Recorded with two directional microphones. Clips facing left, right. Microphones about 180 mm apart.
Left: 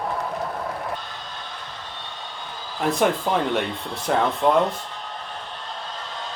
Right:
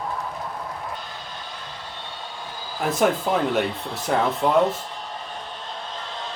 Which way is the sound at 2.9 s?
Centre (ahead or behind).